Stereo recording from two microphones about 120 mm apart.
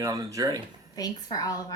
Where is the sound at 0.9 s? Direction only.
30° left (ahead or behind).